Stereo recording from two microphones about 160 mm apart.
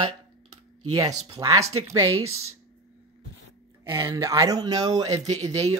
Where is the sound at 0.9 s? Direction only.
20° right (ahead or behind).